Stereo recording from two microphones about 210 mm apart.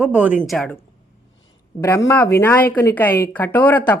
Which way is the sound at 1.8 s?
10° left (ahead or behind).